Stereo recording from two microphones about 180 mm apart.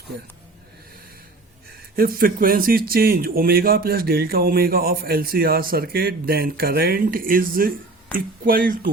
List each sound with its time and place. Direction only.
2.0 s speech: 55° right (ahead or behind)